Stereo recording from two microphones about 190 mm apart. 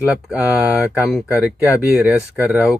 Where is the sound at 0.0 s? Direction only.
5° right (ahead or behind).